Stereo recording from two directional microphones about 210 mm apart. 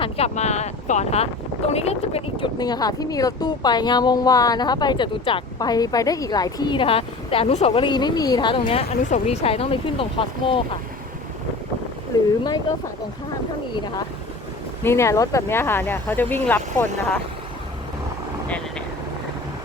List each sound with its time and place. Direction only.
0.0 s speech: 30° left (ahead or behind)
12.1 s speech: 15° left (ahead or behind)
14.8 s speech: 15° left (ahead or behind)